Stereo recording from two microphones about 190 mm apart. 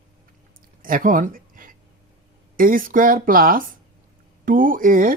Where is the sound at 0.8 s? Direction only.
45° right (ahead or behind).